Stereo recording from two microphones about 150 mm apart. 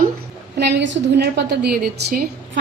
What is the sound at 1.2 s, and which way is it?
A woman's voice, 90° right.